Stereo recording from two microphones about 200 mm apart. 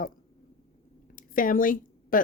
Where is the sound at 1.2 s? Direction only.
45° left (ahead or behind).